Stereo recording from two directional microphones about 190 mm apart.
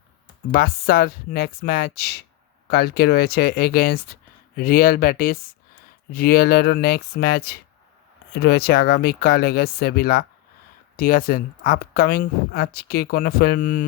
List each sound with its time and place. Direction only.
0.5 s speech: 50° left (ahead or behind)